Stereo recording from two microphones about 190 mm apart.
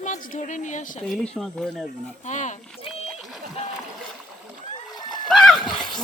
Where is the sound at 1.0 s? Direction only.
5° left (ahead or behind).